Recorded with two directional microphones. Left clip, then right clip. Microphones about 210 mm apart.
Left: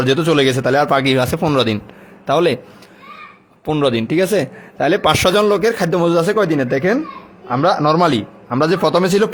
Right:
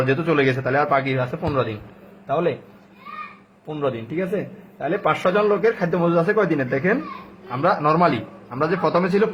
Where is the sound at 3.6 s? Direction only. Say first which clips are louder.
Left 9 dB; 50° left (ahead or behind).